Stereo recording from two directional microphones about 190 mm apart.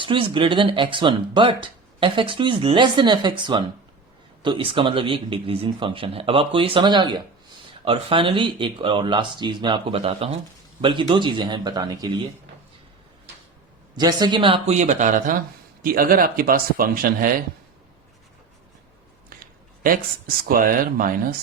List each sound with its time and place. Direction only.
0.0 s speech: 25° right (ahead or behind)
13.9 s speech: 20° right (ahead or behind); by 17.4 s 45° right (ahead or behind)
19.4 s speech: 50° right (ahead or behind)